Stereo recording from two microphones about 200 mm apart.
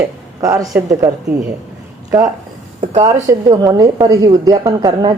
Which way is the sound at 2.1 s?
10° right (ahead or behind).